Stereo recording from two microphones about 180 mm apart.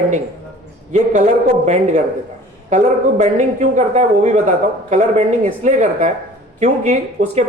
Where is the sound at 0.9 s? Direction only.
40° right (ahead or behind).